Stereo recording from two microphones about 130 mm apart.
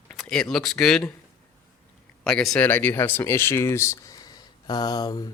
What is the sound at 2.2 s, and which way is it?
Speech, 5° left (ahead or behind).